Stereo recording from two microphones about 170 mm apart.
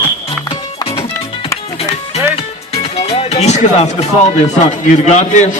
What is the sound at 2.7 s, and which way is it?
Music, 35° left (ahead or behind).